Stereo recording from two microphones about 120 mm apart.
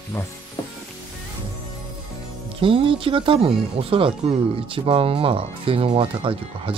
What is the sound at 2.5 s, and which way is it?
Speech, 50° right (ahead or behind).